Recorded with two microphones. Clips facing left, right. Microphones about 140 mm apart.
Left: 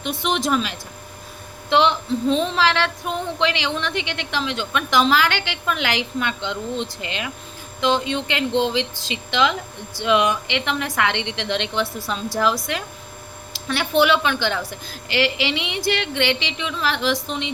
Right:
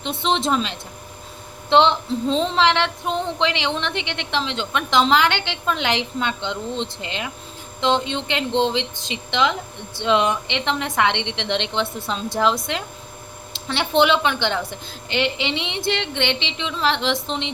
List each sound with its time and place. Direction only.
0.0 s female singing: 25° right (ahead or behind)